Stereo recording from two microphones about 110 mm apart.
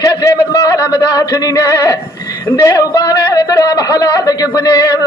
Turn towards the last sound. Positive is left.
turn(degrees=35)  # may be behind; listen again after turning